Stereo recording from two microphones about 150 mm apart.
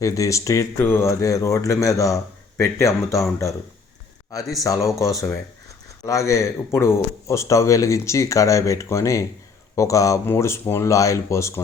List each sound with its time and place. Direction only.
0.0 s speech: 20° left (ahead or behind)
4.6 s speech: 20° left (ahead or behind)